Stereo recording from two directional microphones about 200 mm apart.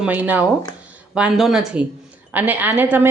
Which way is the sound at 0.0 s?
10° right (ahead or behind).